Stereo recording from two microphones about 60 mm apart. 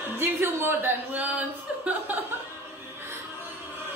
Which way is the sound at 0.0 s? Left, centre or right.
Right.